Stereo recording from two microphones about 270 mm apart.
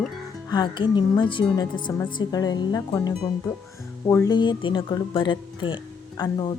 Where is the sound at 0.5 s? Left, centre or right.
Centre.